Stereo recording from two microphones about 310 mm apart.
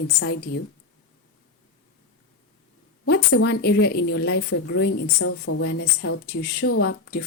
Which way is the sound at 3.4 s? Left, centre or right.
Left.